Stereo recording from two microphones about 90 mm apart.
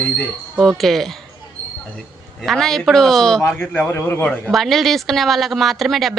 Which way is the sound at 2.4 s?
5° left (ahead or behind).